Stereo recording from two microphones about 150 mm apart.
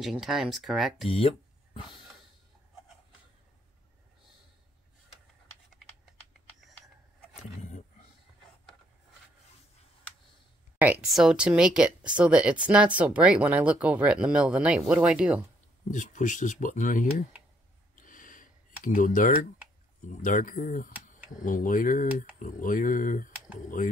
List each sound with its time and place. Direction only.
0.0 s speech: centre (ahead or behind)
1.0 s speech: 40° left (ahead or behind)
7.4 s roaring cats: 50° left (ahead or behind)
11.1 s speech: 5° right (ahead or behind)
15.9 s speech: 55° left (ahead or behind)
17.9 s snort: 65° left (ahead or behind)
18.9 s speech: 60° left (ahead or behind)